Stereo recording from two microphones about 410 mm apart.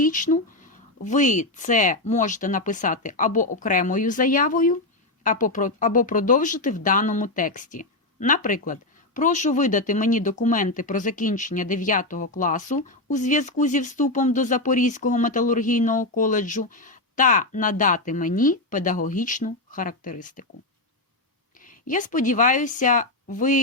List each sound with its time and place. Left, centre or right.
0.0 s speech: centre
21.6 s a woman's voice: centre